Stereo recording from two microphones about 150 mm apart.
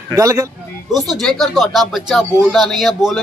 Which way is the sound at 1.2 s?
Centre (ahead or behind).